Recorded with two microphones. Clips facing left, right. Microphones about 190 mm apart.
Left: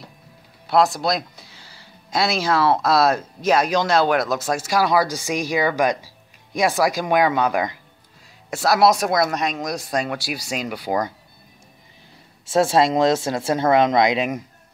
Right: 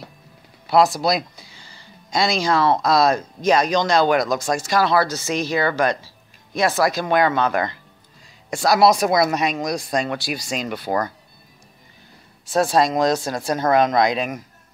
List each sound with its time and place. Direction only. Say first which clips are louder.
0.7 s speech: right 2 dB; centre (ahead or behind); by 11.1 s 15° left (ahead or behind)
12.4 s speech: left 1 dB; 25° left (ahead or behind)